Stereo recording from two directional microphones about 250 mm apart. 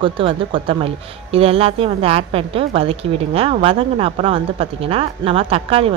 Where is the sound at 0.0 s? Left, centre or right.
Right.